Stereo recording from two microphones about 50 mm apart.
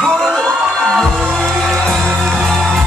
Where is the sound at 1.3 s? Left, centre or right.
Centre.